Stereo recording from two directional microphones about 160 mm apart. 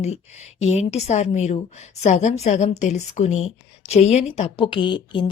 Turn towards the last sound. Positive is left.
turn(degrees=30)  # may be behind; listen again after turning